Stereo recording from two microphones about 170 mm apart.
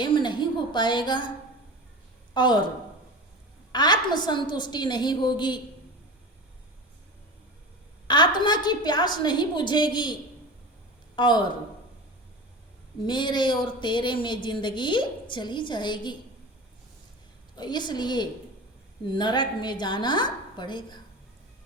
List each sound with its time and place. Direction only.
0.0 s a sound: 25° left (ahead or behind)
2.3 s speech: 25° left (ahead or behind)
3.7 s speech: 25° left (ahead or behind)
8.0 s speech: 25° left (ahead or behind)
11.2 s speech: 25° left (ahead or behind)
13.1 s speech: 25° left (ahead or behind)
17.5 s speech: 25° left (ahead or behind)